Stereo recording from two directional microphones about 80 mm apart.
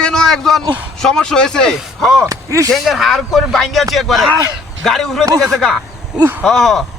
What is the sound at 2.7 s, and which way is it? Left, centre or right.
Speech, centre.